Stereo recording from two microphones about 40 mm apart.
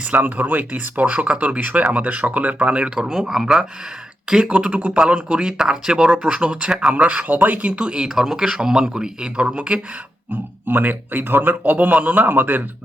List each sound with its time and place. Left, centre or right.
0.2 s speech: right
2.9 s speech: centre
4.5 s speech: right
5.4 s speech: centre
6.2 s speech: right
7.3 s a man's voice: right
7.7 s speech: right
8.1 s speech: centre; by 9.8 s right
10.7 s a man's voice: right
12.3 s speech: right